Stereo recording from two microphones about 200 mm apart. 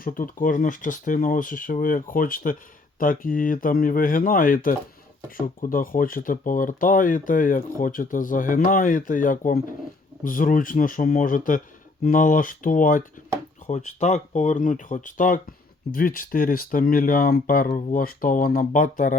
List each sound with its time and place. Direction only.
0.0 s speech: 45° left (ahead or behind)